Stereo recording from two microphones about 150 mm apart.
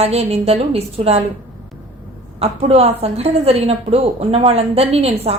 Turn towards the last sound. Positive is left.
turn(degrees=-40)  # may be behind; listen again after turning